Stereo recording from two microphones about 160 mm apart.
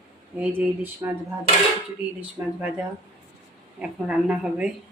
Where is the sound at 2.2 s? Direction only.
10° right (ahead or behind).